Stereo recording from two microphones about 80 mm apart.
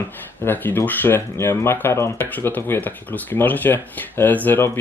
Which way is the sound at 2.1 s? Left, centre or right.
Left.